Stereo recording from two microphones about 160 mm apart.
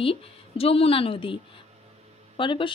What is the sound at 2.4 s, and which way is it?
Speech, 30° left (ahead or behind).